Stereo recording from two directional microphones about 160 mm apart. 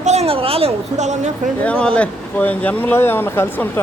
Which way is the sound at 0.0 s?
45° right (ahead or behind).